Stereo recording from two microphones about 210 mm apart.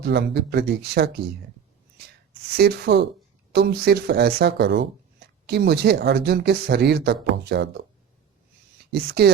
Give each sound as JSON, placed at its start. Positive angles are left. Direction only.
{"t": 0.0, "sound": "speech", "side_deg": -55}
{"t": 2.6, "sound": "speech", "side_deg": -50}
{"t": 8.9, "sound": "speech", "side_deg": -50}